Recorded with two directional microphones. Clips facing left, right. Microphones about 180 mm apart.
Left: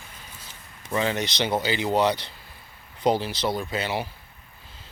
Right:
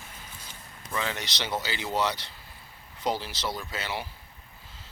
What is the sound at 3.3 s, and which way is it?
Speech, 60° left (ahead or behind).